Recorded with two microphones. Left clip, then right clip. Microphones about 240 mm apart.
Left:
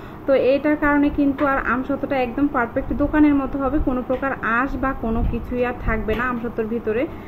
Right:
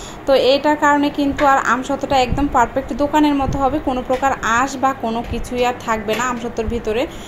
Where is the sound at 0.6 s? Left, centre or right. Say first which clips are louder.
Right 4 dB; centre.